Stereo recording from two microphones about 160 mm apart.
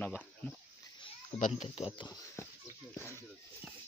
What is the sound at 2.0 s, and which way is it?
Speech, 25° left (ahead or behind).